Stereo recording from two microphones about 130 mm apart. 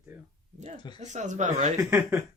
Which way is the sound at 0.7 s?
35° left (ahead or behind).